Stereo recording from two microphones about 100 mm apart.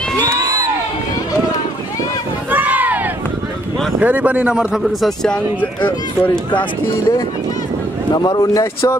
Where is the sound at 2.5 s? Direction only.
15° right (ahead or behind).